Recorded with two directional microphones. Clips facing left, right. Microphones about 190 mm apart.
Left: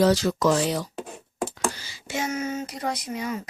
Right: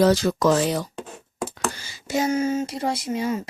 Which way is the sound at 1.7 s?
45° right (ahead or behind).